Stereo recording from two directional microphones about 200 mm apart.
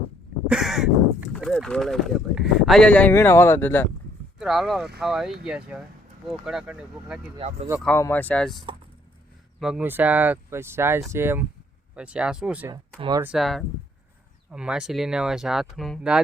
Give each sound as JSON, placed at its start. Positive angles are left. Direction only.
{"t": 0.4, "sound": "crow", "side_deg": -5}
{"t": 1.3, "sound": "speech", "side_deg": 0}
{"t": 4.4, "sound": "speech", "side_deg": 0}
{"t": 7.3, "sound": "speech", "side_deg": -35}
{"t": 7.8, "sound": "speech", "side_deg": 10}
{"t": 9.6, "sound": "speech", "side_deg": -5}
{"t": 13.0, "sound": "speech", "side_deg": -20}
{"t": 13.2, "sound": "speech", "side_deg": 0}